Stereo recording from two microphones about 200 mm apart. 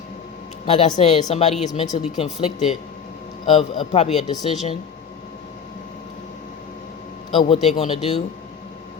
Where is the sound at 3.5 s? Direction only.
25° left (ahead or behind).